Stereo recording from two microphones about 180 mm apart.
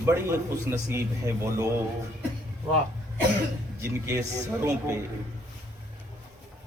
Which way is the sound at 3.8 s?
15° right (ahead or behind).